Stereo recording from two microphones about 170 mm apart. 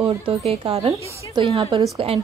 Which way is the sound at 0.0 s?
35° right (ahead or behind).